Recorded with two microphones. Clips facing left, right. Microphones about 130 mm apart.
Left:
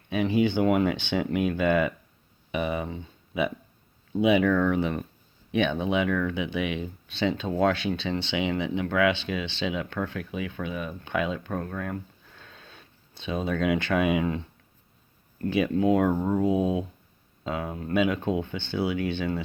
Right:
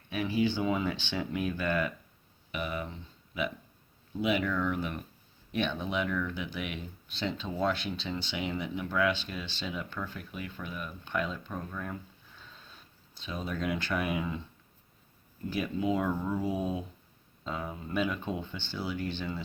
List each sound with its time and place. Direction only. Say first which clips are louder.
0.1 s speech: left 6 dB; 65° left (ahead or behind)
4.3 s speech: left 8 dB; 70° left (ahead or behind)
5.5 s speech: left 7 dB; 60° left (ahead or behind); by 6.8 s 80° left
7.4 s speech: left 5 dB; 70° left (ahead or behind)
16.1 s speech: left 8 dB; 50° left (ahead or behind)